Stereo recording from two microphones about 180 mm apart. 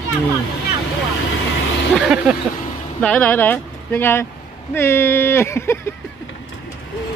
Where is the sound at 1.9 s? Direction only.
5° right (ahead or behind).